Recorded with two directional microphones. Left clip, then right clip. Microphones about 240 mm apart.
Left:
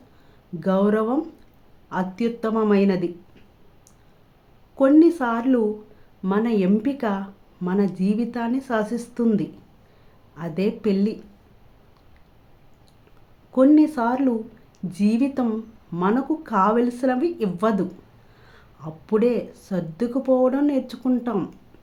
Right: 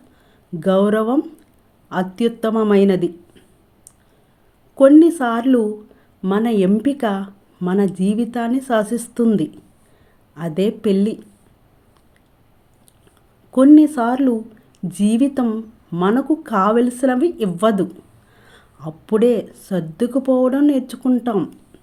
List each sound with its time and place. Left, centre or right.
0.6 s speech: right
4.8 s speech: right
13.5 s speech: right